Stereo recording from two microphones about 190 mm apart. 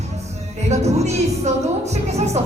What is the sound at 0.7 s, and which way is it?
Speech, 35° right (ahead or behind).